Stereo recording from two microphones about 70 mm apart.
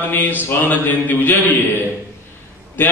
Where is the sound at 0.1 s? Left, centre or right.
Left.